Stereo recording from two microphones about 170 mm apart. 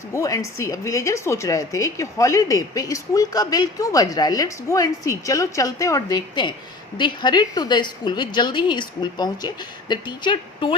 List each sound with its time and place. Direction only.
0.1 s a woman's voice: 20° left (ahead or behind)